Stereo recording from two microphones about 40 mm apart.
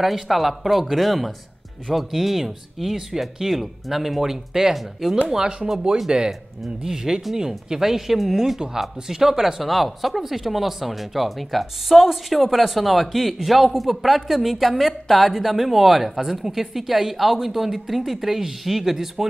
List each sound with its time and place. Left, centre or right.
0.0 s speech: centre